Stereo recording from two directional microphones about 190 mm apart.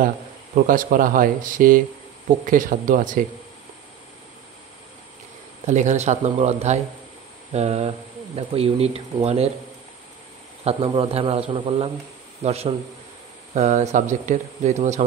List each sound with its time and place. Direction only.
0.7 s speech: 45° right (ahead or behind)
5.7 s speech: 40° right (ahead or behind)
10.6 s speech: 30° right (ahead or behind)